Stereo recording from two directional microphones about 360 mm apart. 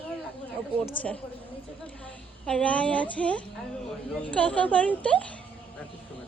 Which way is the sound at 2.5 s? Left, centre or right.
Centre.